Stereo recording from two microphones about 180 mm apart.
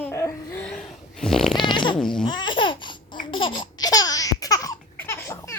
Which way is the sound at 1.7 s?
25° left (ahead or behind).